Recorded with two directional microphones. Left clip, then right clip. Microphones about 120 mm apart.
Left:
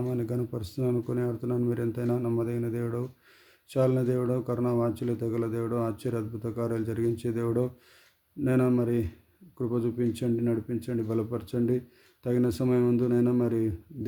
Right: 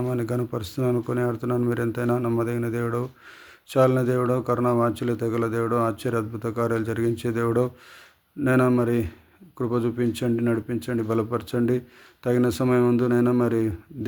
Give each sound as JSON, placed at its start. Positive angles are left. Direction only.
{"t": 0.0, "sound": "a man's voice", "side_deg": 20}